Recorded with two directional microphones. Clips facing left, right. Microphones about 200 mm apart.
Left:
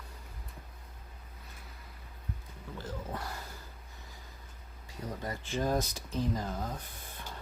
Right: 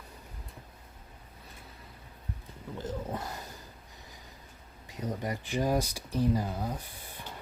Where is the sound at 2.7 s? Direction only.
20° right (ahead or behind).